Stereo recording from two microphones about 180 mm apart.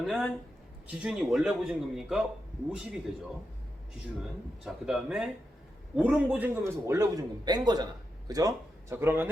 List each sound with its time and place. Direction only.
0.0 s a man's voice: centre (ahead or behind)
4.2 s a man's voice: centre (ahead or behind)